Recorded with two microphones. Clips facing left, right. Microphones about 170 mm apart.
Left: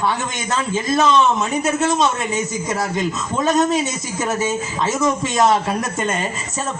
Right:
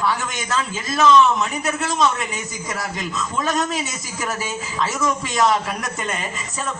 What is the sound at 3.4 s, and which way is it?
A man's voice, 25° left (ahead or behind).